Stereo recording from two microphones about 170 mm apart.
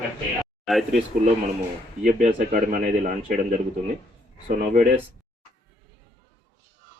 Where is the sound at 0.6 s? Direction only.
Centre (ahead or behind).